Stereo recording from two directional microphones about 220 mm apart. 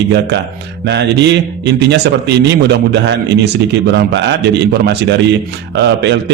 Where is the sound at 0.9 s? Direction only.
50° right (ahead or behind).